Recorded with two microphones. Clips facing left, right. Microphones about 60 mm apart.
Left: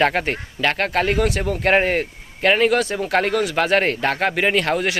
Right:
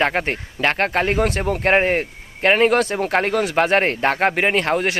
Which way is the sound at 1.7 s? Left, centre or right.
Centre.